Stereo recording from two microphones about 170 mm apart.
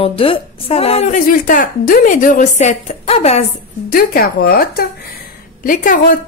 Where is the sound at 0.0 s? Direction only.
35° left (ahead or behind).